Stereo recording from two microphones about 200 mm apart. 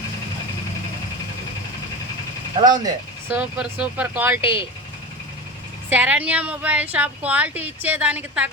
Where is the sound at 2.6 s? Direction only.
20° right (ahead or behind).